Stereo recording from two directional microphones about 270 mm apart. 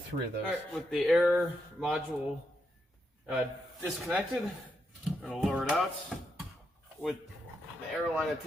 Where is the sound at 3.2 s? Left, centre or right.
Centre.